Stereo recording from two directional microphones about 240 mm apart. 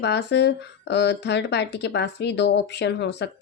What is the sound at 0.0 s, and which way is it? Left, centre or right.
Speech, left.